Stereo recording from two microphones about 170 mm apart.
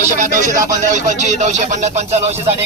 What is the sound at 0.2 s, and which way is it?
Speech, 50° right (ahead or behind).